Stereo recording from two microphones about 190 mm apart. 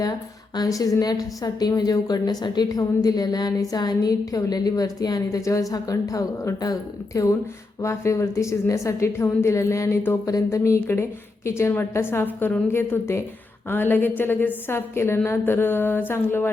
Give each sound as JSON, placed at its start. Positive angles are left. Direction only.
{"t": 0.5, "sound": "a woman's voice", "side_deg": 20}